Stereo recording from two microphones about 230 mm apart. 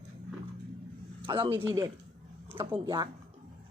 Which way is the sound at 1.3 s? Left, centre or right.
Right.